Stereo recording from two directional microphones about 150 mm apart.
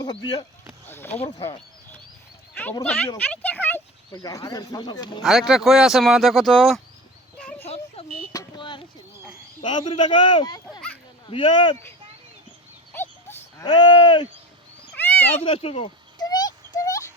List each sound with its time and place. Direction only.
0.0 s speech: 30° left (ahead or behind)
0.9 s speech: 15° left (ahead or behind)
2.8 s speech: 10° left (ahead or behind)
4.1 s speech: 25° left (ahead or behind)
5.2 s speech: centre (ahead or behind)
7.6 s a sound: 40° left (ahead or behind)
8.3 s speech: 25° left (ahead or behind)
12.9 s livestock: 15° left (ahead or behind)
13.7 s speech: 30° left (ahead or behind)
14.9 s cat: 10° left (ahead or behind)
15.4 s a sound: 40° left (ahead or behind); by 17.1 s 25° left (ahead or behind)